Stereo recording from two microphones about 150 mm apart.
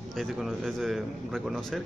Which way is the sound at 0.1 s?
Centre (ahead or behind).